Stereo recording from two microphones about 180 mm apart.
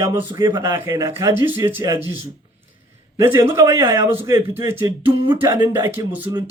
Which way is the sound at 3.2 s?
15° right (ahead or behind).